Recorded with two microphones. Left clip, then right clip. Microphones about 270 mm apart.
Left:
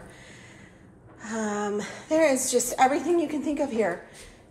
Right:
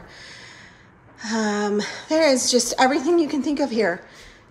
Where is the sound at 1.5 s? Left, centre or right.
Right.